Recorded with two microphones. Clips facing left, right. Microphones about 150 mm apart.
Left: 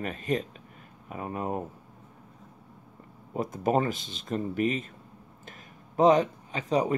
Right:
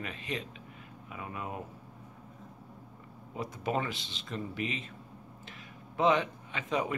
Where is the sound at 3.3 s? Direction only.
45° left (ahead or behind).